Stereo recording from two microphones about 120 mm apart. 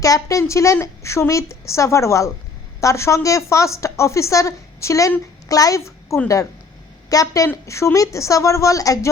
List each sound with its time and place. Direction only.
0.0 s a woman's voice: 30° left (ahead or behind)